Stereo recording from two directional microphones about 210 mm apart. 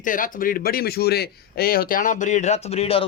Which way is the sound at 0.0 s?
40° left (ahead or behind).